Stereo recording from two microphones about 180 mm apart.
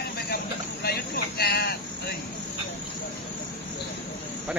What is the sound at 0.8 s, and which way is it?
Speech, 60° left (ahead or behind).